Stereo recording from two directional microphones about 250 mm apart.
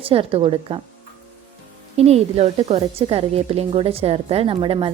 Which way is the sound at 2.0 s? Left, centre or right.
Right.